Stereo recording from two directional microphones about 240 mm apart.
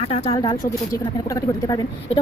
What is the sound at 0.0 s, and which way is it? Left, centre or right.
A woman's voice, left.